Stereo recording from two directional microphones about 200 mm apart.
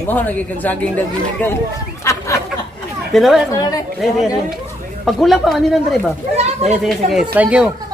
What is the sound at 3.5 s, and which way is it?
Speech, 20° left (ahead or behind).